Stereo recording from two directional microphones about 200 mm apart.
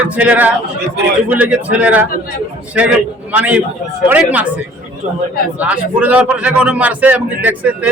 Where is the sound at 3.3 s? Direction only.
5° right (ahead or behind).